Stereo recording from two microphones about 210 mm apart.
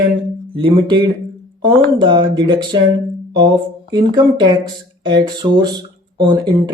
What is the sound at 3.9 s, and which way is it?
Speech, 20° right (ahead or behind).